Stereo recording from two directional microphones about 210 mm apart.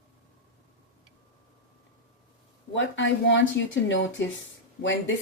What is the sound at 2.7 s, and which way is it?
Speech, 60° left (ahead or behind).